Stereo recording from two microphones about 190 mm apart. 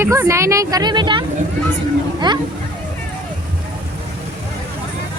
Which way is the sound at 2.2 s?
25° right (ahead or behind).